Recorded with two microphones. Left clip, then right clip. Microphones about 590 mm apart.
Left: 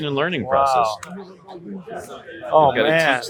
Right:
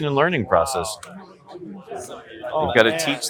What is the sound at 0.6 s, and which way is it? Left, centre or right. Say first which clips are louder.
Speech: left 8 dB; right.